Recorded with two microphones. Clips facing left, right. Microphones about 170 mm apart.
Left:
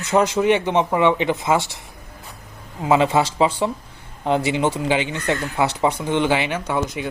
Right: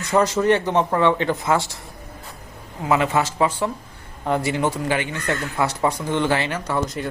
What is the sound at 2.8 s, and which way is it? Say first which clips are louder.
Speech: left 3 dB; 20° left (ahead or behind).